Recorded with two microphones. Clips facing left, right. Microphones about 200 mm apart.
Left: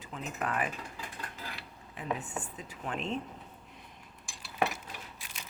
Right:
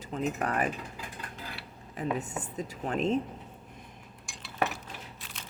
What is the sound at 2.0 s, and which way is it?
Speech, 40° right (ahead or behind).